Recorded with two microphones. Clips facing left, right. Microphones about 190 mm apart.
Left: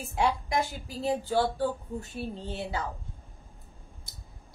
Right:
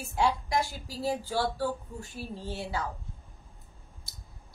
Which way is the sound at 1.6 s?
20° left (ahead or behind).